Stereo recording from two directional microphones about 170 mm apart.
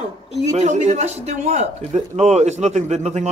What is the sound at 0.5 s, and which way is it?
Speech, 45° right (ahead or behind).